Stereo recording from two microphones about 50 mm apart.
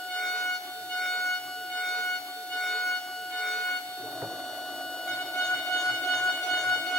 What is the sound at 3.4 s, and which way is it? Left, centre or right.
Train, centre.